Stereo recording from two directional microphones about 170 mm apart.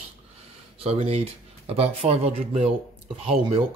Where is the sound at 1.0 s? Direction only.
35° right (ahead or behind).